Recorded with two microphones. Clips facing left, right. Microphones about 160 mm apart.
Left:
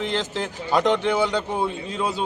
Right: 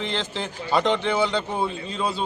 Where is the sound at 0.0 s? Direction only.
5° left (ahead or behind).